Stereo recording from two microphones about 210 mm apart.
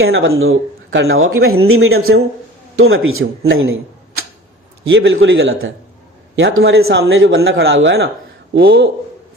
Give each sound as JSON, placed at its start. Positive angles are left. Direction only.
{"t": 0.0, "sound": "a man's voice", "side_deg": -65}
{"t": 2.7, "sound": "a man's voice", "side_deg": -75}
{"t": 8.5, "sound": "speech", "side_deg": -50}